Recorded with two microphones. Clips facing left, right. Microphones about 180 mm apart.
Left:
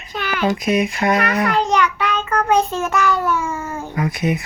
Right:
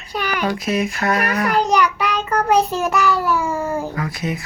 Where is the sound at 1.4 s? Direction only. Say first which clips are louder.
Right 1 dB; 10° right (ahead or behind).